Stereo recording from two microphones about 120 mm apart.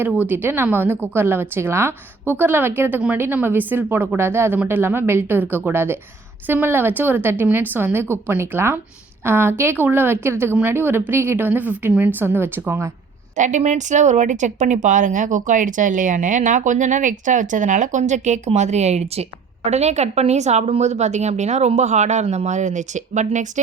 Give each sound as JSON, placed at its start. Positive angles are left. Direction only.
{"t": 0.3, "sound": "a woman's voice", "side_deg": -15}
{"t": 13.3, "sound": "a woman's voice", "side_deg": -90}